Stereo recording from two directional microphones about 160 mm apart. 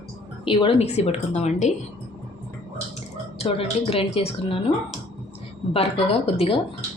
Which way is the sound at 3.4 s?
35° left (ahead or behind).